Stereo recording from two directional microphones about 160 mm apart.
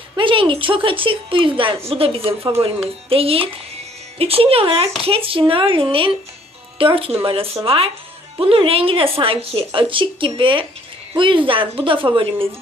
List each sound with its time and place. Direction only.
0.2 s a woman's voice: 30° right (ahead or behind)